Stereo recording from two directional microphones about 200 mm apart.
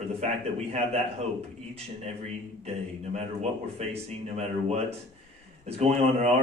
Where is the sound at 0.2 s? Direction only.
30° right (ahead or behind).